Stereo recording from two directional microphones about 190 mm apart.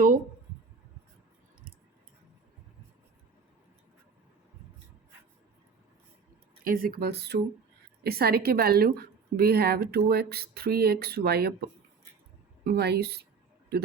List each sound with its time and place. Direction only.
6.7 s a woman's voice: 50° right (ahead or behind)
12.6 s a woman's voice: 60° right (ahead or behind)